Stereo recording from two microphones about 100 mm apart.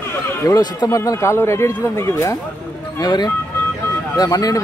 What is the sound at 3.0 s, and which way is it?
Speech, 45° left (ahead or behind).